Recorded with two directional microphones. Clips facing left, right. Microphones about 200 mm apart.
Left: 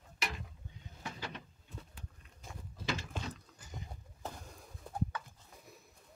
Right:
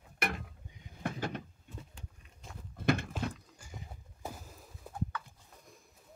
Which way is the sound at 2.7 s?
55° right (ahead or behind).